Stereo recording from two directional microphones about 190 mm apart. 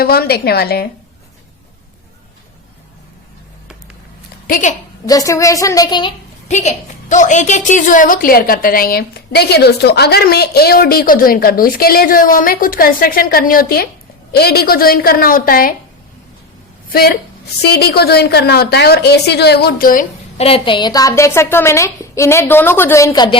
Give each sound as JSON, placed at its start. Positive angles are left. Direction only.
{"t": 0.0, "sound": "a woman's voice", "side_deg": 55}
{"t": 4.4, "sound": "a woman's voice", "side_deg": 45}
{"t": 5.0, "sound": "a woman's voice", "side_deg": 20}
{"t": 6.5, "sound": "a woman's voice", "side_deg": 40}
{"t": 16.9, "sound": "a woman's voice", "side_deg": 55}
{"t": 20.4, "sound": "a woman's voice", "side_deg": 30}